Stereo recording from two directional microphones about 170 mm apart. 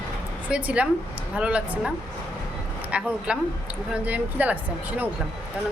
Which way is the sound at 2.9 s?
5° right (ahead or behind).